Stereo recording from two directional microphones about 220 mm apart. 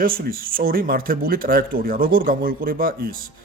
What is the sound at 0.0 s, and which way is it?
Speech, 40° right (ahead or behind).